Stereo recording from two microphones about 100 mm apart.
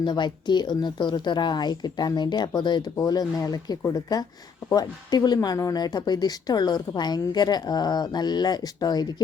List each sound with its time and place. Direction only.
0.0 s speech: 50° left (ahead or behind)
2.9 s speech: 35° left (ahead or behind)